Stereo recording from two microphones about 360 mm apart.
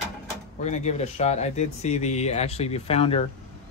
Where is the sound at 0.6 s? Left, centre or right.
Centre.